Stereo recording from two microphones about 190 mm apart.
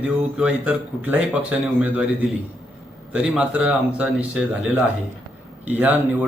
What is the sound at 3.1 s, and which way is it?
A man's voice, 5° right (ahead or behind).